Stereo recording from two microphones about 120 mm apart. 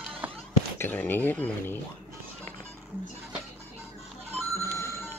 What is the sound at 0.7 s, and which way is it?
Speech, 15° left (ahead or behind).